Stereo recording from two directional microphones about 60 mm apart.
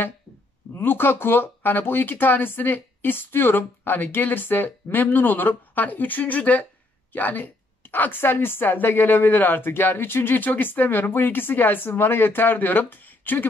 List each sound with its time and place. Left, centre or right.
0.7 s a woman's voice: left